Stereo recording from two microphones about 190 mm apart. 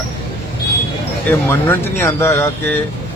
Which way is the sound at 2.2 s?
15° left (ahead or behind).